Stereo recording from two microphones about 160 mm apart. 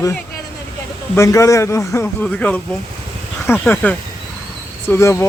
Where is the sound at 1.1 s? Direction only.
20° left (ahead or behind).